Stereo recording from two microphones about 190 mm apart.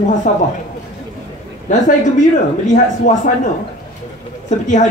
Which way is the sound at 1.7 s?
40° left (ahead or behind).